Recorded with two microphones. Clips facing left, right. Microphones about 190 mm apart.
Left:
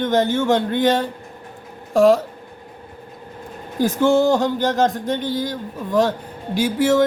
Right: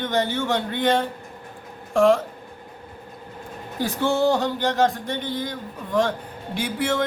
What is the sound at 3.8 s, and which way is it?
A man's voice, 45° left (ahead or behind).